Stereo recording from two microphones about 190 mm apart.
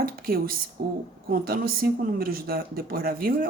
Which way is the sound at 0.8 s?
55° right (ahead or behind).